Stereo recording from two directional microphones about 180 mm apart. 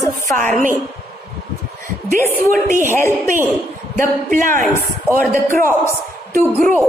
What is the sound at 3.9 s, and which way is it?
Speech, 45° right (ahead or behind).